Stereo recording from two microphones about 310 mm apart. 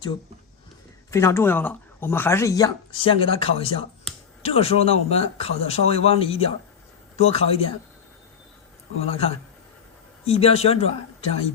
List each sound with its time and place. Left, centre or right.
1.1 s speech: centre
9.0 s speech: centre